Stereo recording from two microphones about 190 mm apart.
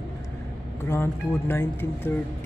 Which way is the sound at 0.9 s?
10° left (ahead or behind).